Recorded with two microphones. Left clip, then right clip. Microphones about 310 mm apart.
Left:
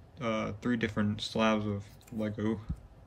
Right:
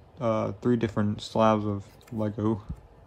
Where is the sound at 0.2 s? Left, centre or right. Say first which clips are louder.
Right 7 dB; centre.